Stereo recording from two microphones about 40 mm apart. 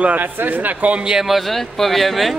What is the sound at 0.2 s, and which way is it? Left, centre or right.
Speech, right.